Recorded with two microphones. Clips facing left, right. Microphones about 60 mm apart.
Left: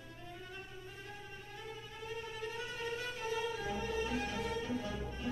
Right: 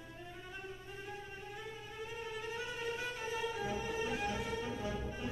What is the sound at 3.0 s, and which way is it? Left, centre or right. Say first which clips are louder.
Music: left 1 dB; centre.